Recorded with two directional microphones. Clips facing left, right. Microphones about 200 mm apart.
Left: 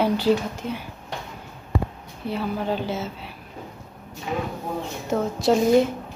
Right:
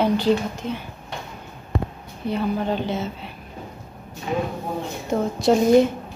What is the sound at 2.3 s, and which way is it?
A woman's voice, 5° left (ahead or behind).